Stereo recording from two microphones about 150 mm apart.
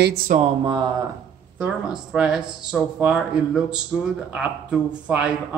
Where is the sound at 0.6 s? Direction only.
30° right (ahead or behind).